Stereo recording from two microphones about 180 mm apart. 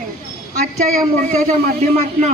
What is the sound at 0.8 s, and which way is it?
Speech, 40° right (ahead or behind).